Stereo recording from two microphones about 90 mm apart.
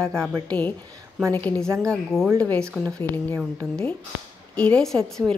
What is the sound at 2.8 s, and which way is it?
Speech, 20° left (ahead or behind).